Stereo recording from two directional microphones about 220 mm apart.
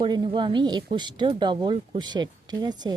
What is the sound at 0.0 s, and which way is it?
Speech, 20° right (ahead or behind).